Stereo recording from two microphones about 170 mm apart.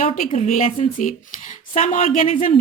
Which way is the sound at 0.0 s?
50° left (ahead or behind).